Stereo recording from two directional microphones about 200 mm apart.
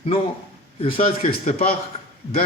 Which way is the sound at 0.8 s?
45° left (ahead or behind).